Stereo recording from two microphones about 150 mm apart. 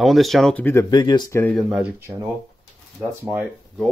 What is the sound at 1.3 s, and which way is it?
Speech, 10° left (ahead or behind).